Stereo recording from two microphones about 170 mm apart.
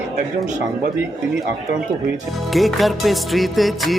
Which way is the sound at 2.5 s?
Centre (ahead or behind).